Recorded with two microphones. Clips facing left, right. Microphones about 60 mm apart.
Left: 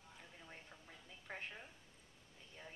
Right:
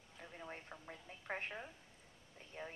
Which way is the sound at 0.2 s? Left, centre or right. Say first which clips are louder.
Right 9 dB; right.